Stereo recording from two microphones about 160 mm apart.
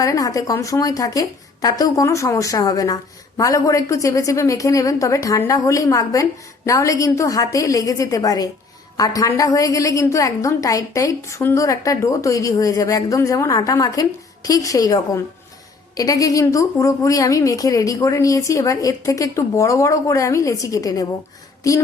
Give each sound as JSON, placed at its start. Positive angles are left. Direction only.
{"t": 0.0, "sound": "a woman's voice", "side_deg": 20}